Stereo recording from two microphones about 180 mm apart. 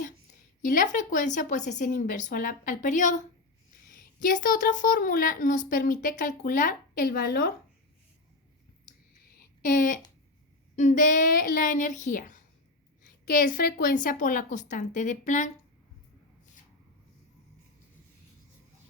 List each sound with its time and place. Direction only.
0.6 s a woman's voice: 45° left (ahead or behind)
9.6 s a woman's voice: 50° left (ahead or behind)